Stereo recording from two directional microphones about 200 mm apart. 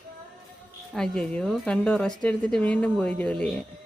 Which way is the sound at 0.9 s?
5° left (ahead or behind).